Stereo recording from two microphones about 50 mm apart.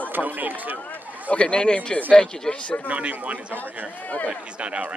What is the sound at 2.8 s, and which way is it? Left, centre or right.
Speech, right.